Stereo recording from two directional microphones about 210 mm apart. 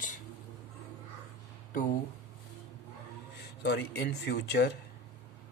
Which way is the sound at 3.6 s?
55° left (ahead or behind).